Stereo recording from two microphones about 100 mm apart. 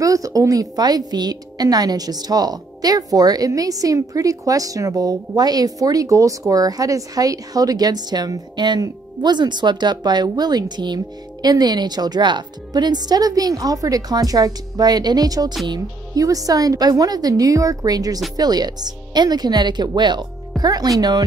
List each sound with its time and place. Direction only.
0.0 s a woman's voice: 35° right (ahead or behind)